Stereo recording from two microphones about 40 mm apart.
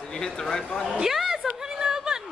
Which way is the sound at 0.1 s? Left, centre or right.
Centre.